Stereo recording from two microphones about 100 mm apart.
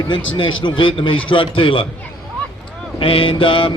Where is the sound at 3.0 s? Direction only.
65° left (ahead or behind).